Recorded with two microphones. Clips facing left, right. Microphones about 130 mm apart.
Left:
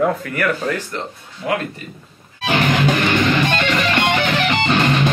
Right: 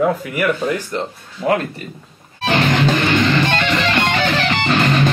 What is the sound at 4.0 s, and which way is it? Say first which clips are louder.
Music: even; 15° left (ahead or behind).